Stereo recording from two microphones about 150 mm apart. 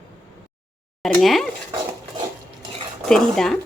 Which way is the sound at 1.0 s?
Centre (ahead or behind).